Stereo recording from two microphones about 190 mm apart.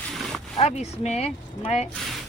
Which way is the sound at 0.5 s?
35° left (ahead or behind).